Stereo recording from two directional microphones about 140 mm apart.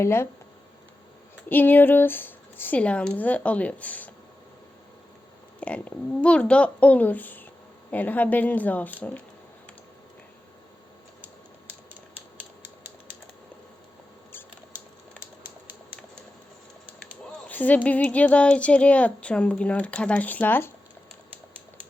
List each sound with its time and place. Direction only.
0.0 s speech: 15° left (ahead or behind)
1.5 s speech: 15° left (ahead or behind)
5.5 s speech: 10° left (ahead or behind)
17.5 s speech: 10° left (ahead or behind)